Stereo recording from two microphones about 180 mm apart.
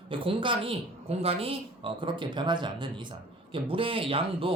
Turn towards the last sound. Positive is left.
turn(degrees=-30)  # may be behind; listen again after turning